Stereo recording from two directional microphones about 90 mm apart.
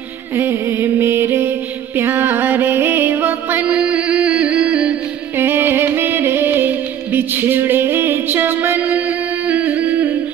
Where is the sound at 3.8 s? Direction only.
15° right (ahead or behind).